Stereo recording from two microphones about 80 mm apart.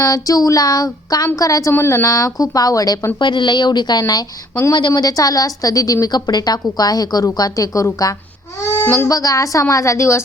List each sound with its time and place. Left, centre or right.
0.0 s a woman's voice: left
1.7 s a woman's voice: left
2.0 s a woman's voice: left
3.2 s a woman's voice: left
8.8 s speech: left
9.0 s a woman's voice: left